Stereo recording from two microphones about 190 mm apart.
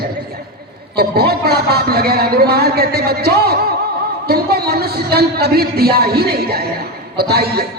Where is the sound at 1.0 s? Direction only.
55° right (ahead or behind).